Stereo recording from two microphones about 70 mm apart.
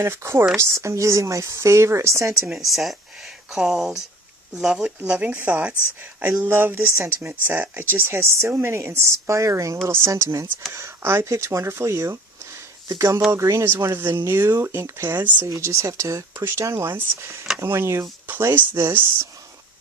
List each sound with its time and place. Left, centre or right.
0.0 s speech: right
2.6 s speech: centre; by 15.1 s right
15.1 s speech: right
15.4 s speech: right